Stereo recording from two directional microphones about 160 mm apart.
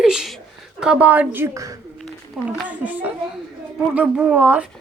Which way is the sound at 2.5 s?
10° right (ahead or behind).